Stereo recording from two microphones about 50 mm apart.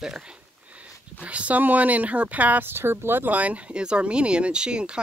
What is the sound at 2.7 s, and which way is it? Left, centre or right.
Speech, right.